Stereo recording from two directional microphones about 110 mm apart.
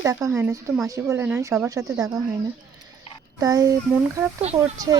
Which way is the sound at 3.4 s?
30° right (ahead or behind).